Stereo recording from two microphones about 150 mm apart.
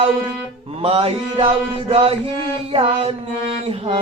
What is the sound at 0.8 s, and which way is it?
Mantra, 40° right (ahead or behind).